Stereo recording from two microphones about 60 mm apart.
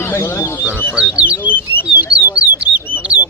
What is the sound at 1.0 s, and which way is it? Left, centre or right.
Speech, centre.